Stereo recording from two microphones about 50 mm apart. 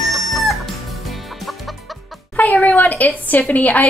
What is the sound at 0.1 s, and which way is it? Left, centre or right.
Chicken, centre.